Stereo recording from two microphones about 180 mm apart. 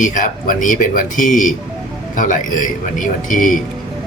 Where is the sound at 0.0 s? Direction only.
45° left (ahead or behind).